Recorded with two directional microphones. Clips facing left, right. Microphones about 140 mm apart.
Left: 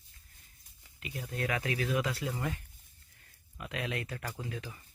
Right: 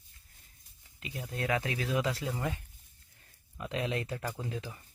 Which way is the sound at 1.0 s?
25° right (ahead or behind).